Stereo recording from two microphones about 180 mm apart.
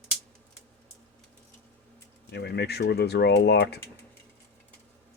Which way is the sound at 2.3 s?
65° left (ahead or behind).